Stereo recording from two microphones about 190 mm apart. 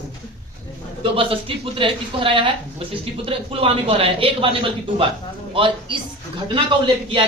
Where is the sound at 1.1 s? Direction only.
30° right (ahead or behind).